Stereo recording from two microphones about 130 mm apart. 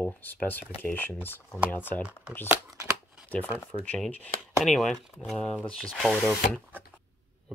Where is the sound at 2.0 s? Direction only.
10° right (ahead or behind).